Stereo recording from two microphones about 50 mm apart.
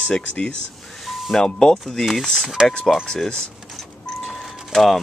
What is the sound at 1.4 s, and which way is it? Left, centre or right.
Speech, centre.